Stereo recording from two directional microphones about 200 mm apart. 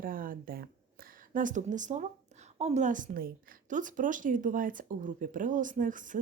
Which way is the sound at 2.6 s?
35° right (ahead or behind).